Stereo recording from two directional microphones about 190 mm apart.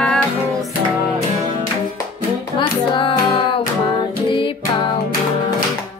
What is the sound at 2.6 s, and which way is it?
Music, 25° left (ahead or behind).